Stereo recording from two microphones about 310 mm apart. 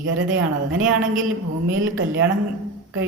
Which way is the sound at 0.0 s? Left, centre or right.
Right.